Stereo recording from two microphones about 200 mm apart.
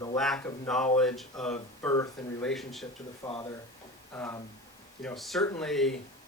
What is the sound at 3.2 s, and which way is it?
Speech, 25° left (ahead or behind).